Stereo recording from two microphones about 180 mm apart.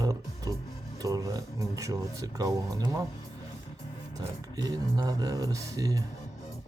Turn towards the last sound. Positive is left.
turn(degrees=-20)  # may be behind; listen again after turning